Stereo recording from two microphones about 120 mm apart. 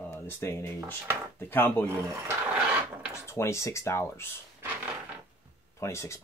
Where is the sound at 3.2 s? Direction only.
25° left (ahead or behind).